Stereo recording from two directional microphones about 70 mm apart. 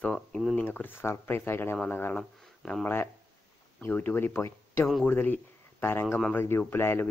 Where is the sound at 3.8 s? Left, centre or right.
Left.